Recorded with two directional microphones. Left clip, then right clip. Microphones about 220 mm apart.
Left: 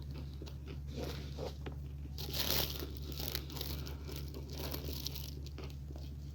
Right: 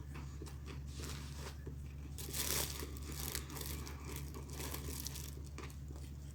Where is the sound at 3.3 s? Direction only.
20° left (ahead or behind).